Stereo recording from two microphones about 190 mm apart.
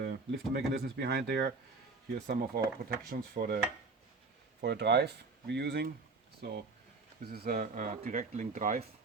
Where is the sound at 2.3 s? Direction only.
55° right (ahead or behind).